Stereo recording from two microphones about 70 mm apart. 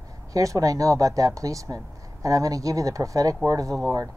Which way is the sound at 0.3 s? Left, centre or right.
Right.